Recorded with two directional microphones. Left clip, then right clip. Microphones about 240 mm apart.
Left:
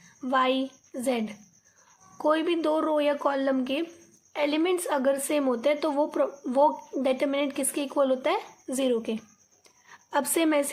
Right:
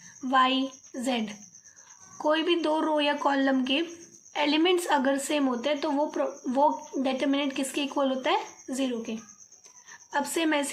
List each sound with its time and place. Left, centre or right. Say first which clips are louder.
0.2 s speech: right 1 dB; left